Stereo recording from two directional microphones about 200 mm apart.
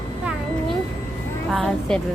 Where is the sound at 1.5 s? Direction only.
Centre (ahead or behind).